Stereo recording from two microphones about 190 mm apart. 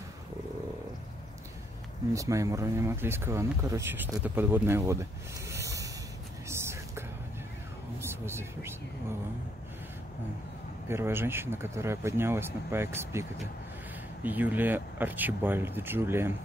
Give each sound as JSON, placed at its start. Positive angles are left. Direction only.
{"t": 2.1, "sound": "speech", "side_deg": -15}
{"t": 5.5, "sound": "sanding", "side_deg": -15}
{"t": 6.5, "sound": "whispering", "side_deg": -15}
{"t": 8.0, "sound": "speech", "side_deg": -15}
{"t": 10.9, "sound": "speech", "side_deg": -15}